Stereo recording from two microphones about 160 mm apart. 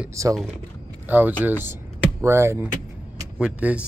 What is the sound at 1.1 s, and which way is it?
Speech, 10° right (ahead or behind).